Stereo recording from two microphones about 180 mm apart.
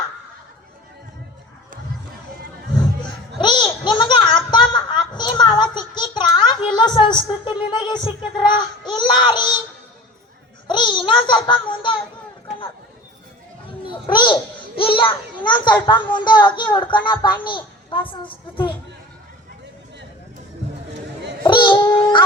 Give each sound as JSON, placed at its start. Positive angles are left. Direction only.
{"t": 3.0, "sound": "music", "side_deg": 25}
{"t": 4.5, "sound": "a sound", "side_deg": 25}
{"t": 10.7, "sound": "a woman's voice", "side_deg": 25}
{"t": 14.1, "sound": "a woman's voice", "side_deg": 25}
{"t": 21.4, "sound": "babbling", "side_deg": 25}